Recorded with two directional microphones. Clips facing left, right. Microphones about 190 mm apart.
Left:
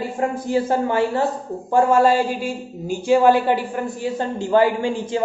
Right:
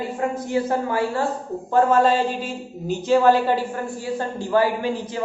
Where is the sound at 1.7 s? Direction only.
10° left (ahead or behind).